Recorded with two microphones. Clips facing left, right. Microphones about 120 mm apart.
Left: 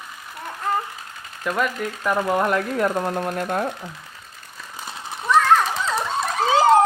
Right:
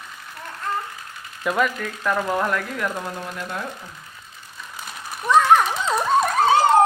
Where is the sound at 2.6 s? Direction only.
35° left (ahead or behind).